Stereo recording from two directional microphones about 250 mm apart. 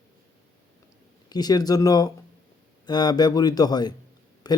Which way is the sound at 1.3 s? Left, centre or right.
Centre.